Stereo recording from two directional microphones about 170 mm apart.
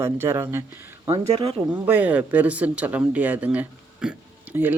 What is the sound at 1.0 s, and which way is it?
Speech, 30° right (ahead or behind).